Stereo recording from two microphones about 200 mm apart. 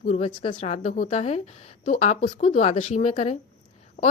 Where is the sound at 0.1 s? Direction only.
30° left (ahead or behind).